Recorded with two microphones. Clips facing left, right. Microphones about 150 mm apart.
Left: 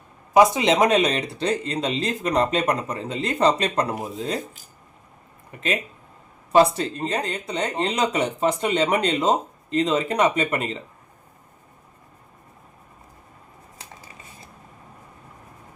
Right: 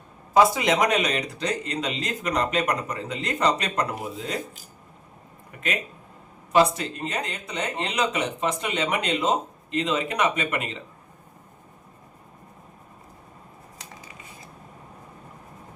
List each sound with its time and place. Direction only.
0.3 s speech: 25° left (ahead or behind)
5.5 s speech: 25° left (ahead or behind)